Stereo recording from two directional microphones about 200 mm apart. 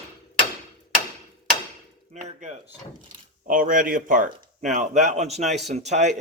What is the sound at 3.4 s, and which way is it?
Speech, 40° right (ahead or behind).